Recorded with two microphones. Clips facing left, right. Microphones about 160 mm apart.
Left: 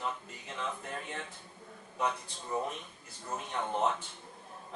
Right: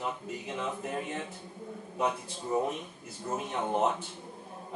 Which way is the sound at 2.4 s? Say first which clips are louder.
Right 5 dB; 20° right (ahead or behind).